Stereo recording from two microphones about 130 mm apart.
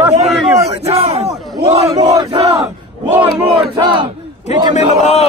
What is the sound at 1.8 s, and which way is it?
Battle cry, 30° right (ahead or behind).